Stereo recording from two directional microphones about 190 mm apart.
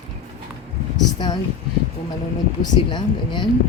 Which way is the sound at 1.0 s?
20° left (ahead or behind).